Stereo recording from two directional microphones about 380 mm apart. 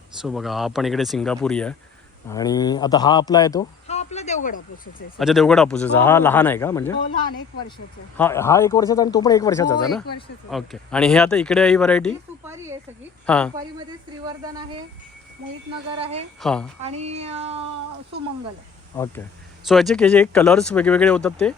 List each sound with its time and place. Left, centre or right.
0.2 s a man's voice: centre
5.2 s speech: centre
8.2 s speech: centre
13.2 s speech: centre
14.3 s speech: centre
15.9 s speech: centre
16.4 s speech: centre
17.0 s speech: centre
19.6 s speech: centre